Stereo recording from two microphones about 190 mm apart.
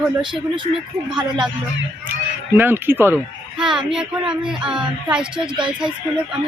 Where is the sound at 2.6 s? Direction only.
10° right (ahead or behind).